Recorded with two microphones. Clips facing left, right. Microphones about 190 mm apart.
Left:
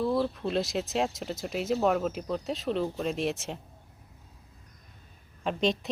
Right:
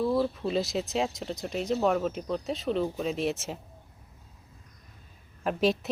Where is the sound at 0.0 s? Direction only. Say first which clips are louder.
Right 1 dB; 5° right (ahead or behind).